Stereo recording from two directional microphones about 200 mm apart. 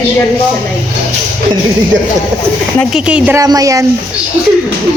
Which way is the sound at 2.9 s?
5° right (ahead or behind).